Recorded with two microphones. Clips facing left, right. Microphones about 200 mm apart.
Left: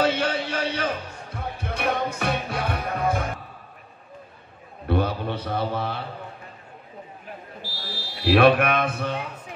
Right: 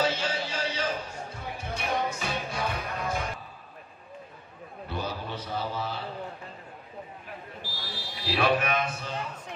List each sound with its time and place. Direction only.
0.0 s music: 60° left (ahead or behind)
4.8 s a man's voice: 60° left (ahead or behind)
7.6 s a sound: 15° right (ahead or behind)
8.2 s a man's voice: 60° left (ahead or behind)